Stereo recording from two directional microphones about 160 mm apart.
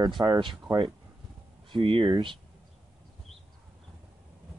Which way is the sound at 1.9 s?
35° right (ahead or behind).